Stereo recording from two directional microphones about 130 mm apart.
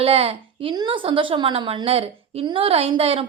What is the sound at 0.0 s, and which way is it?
Speech, 50° right (ahead or behind).